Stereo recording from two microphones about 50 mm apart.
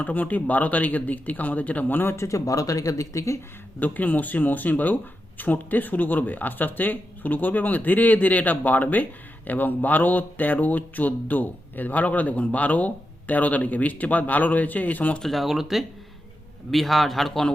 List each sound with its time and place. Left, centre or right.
0.0 s speech: left
2.1 s speech: left
3.8 s speech: left
15.2 s a man's voice: centre